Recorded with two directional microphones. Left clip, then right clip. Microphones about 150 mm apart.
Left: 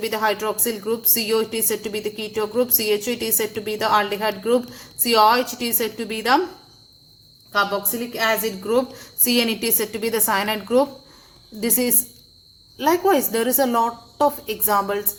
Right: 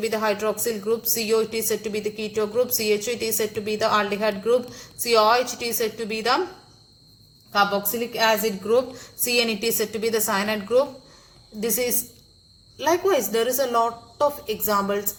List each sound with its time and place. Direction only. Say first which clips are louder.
0.0 s speech: left 1 dB; 55° left (ahead or behind)
7.5 s a woman's voice: even; 55° left (ahead or behind)
12.7 s speech: left 3 dB; 55° left (ahead or behind)